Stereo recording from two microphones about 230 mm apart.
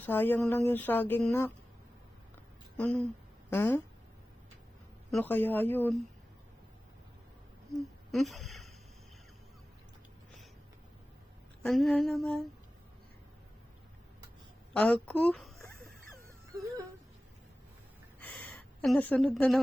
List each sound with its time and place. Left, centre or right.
0.0 s speech: centre
2.7 s speech: centre
5.1 s speech: centre
8.1 s speech: centre
11.6 s a sound: centre
14.7 s a woman's voice: centre
18.2 s a sound: centre